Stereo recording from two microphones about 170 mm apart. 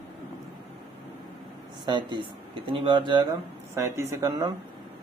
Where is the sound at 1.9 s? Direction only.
30° right (ahead or behind).